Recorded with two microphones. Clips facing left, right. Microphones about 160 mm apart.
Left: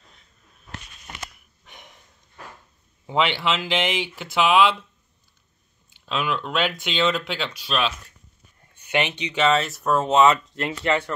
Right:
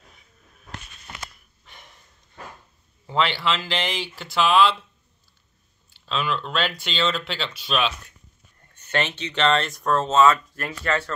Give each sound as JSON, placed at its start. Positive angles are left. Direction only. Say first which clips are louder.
{"t": 1.7, "sound": "sniff", "louder": "left 2 dB", "side_deg": 15}
{"t": 3.1, "sound": "speech", "louder": "left 1 dB", "side_deg": 20}
{"t": 6.0, "sound": "speech", "louder": "left 1 dB", "side_deg": 10}
{"t": 8.7, "sound": "speech", "louder": "left 2 dB", "side_deg": 15}